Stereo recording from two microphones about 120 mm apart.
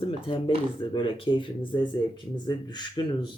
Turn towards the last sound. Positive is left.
turn(degrees=40)  # may be behind; listen again after turning